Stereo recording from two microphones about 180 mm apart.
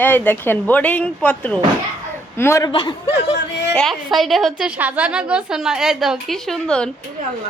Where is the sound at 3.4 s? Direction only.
70° left (ahead or behind).